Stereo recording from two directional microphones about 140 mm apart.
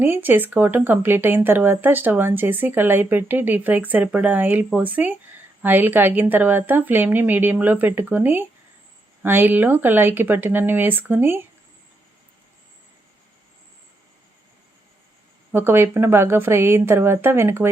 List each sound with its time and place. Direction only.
0.0 s speech: 15° right (ahead or behind)
15.5 s speech: 15° right (ahead or behind)